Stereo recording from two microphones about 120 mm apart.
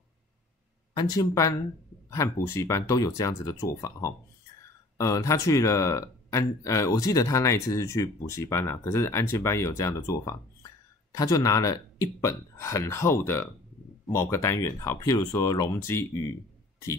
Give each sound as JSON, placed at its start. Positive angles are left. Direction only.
{"t": 0.9, "sound": "speech", "side_deg": 30}